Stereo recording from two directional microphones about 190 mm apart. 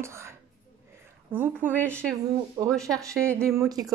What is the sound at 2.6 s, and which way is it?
A woman's voice, 15° right (ahead or behind).